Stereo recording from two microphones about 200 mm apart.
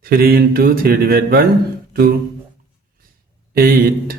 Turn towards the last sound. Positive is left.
turn(degrees=-50)  # may be behind; listen again after turning